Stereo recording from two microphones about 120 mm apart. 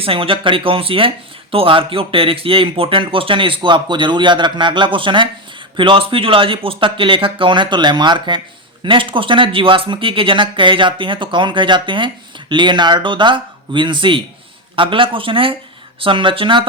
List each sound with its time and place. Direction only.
0.0 s speech: 50° right (ahead or behind)